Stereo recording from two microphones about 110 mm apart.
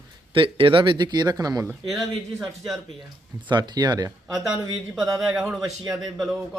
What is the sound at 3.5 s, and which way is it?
Speech, 40° right (ahead or behind).